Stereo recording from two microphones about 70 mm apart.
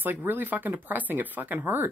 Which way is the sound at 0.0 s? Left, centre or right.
Right.